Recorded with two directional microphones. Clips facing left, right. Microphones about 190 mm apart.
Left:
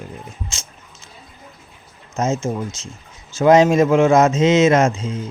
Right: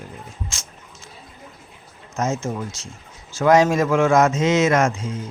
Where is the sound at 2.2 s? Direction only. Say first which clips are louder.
Left 3 dB; 20° left (ahead or behind).